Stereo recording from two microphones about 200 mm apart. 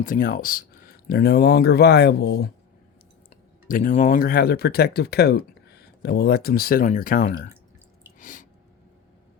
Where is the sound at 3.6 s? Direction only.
40° left (ahead or behind).